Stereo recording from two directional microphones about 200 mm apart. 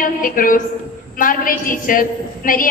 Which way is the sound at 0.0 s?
45° left (ahead or behind).